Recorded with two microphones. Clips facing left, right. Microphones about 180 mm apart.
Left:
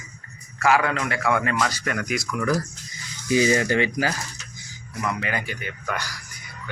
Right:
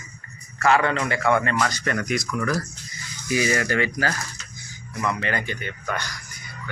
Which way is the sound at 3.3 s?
20° left (ahead or behind).